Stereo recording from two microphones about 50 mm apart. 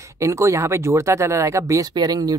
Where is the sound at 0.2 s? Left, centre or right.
Right.